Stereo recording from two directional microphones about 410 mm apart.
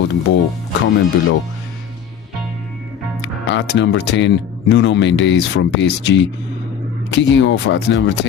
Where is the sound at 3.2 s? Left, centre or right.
Left.